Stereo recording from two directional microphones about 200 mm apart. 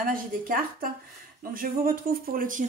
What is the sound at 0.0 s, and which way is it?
Speech, 45° right (ahead or behind).